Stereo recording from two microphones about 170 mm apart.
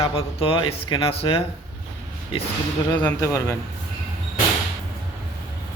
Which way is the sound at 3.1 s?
20° left (ahead or behind).